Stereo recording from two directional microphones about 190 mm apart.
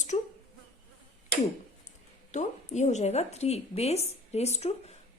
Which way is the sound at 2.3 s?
40° left (ahead or behind).